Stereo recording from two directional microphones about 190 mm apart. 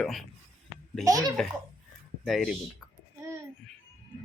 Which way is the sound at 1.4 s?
Centre (ahead or behind).